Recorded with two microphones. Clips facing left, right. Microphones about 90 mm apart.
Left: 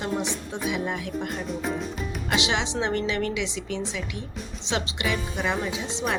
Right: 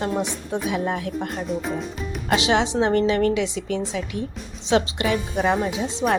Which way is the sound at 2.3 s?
40° right (ahead or behind).